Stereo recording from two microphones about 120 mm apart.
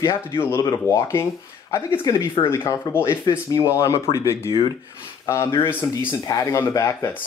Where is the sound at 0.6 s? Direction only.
30° left (ahead or behind).